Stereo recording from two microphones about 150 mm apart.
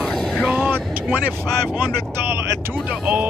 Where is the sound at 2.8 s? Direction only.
5° right (ahead or behind).